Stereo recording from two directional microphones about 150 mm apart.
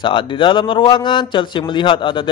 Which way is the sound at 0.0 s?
35° left (ahead or behind).